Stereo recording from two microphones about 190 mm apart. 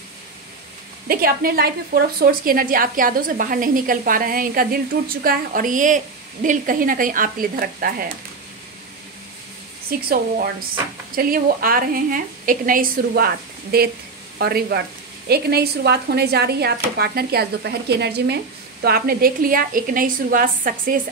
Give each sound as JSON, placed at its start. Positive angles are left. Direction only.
{"t": 1.0, "sound": "a woman's voice", "side_deg": -50}
{"t": 9.8, "sound": "a woman's voice", "side_deg": -50}